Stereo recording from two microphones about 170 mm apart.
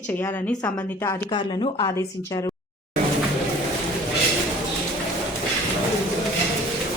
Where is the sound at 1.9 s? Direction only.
15° left (ahead or behind).